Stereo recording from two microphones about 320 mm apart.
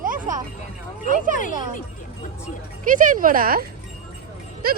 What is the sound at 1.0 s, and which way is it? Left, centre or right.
Speech, right.